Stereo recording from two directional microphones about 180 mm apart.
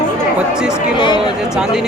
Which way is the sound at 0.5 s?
5° right (ahead or behind).